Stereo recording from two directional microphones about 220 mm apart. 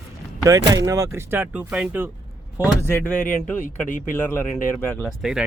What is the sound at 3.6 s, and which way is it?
Speech, 35° left (ahead or behind).